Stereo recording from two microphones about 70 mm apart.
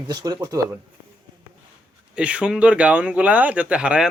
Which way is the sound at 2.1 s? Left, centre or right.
Centre.